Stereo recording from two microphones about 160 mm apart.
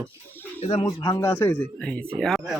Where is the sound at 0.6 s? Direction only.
40° left (ahead or behind).